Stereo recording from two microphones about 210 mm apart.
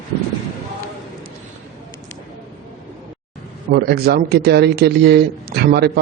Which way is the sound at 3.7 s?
50° right (ahead or behind).